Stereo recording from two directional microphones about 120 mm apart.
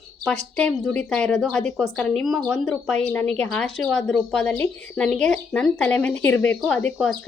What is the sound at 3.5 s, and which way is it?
Speech, 5° left (ahead or behind).